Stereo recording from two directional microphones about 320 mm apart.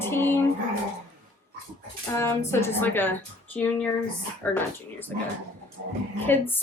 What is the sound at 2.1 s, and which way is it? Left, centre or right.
A woman's voice, centre.